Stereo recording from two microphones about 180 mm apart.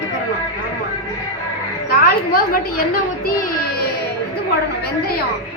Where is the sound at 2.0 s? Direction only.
55° left (ahead or behind).